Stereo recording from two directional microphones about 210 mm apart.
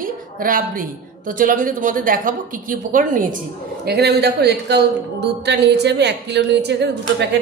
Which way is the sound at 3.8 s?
50° right (ahead or behind).